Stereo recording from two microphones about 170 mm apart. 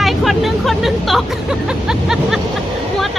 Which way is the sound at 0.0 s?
Centre (ahead or behind).